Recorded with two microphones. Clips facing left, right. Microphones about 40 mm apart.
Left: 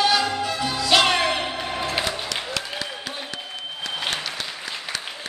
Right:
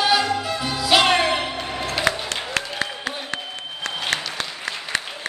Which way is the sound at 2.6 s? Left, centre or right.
Right.